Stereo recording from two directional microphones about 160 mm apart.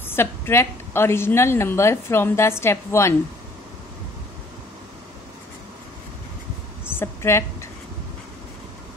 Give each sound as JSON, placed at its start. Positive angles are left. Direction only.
{"t": 0.0, "sound": "a woman's voice", "side_deg": 15}
{"t": 7.0, "sound": "a woman's voice", "side_deg": 15}